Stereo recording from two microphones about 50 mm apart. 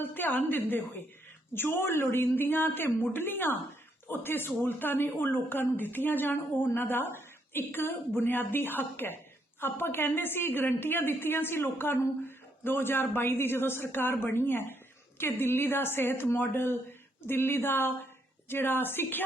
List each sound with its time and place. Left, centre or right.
0.0 s a woman's voice: left